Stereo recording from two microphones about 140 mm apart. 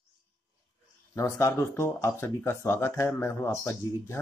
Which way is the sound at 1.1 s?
20° left (ahead or behind).